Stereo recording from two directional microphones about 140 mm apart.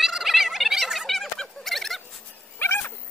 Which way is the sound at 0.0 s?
Centre (ahead or behind).